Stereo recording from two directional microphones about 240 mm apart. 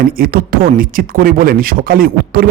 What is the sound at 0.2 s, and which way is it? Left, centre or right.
Speech, right.